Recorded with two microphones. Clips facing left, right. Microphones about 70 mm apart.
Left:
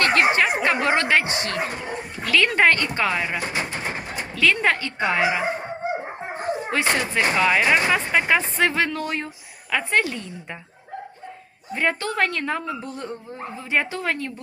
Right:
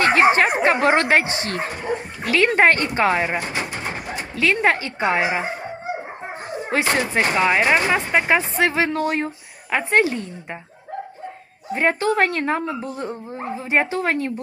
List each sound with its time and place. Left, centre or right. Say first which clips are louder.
0.0 s a sound: right 4 dB; right
0.6 s speech: right 4 dB; right
4.4 s speech: right 2 dB; right
6.7 s speech: right 4 dB; right
8.4 s speech: right 2 dB; centre
8.9 s speech: right 5 dB; right
11.7 s speech: right 5 dB; right
12.8 s speech: right 4 dB; centre; by 14.3 s right